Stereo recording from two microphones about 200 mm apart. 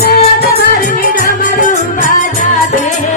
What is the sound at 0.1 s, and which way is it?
Music, 50° left (ahead or behind).